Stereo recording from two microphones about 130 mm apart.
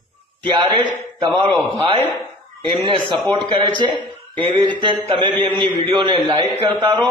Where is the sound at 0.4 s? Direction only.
35° right (ahead or behind).